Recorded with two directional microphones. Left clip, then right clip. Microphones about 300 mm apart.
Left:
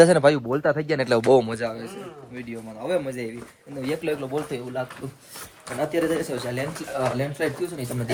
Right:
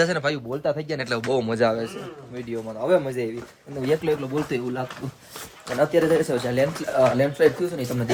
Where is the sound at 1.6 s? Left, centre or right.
Right.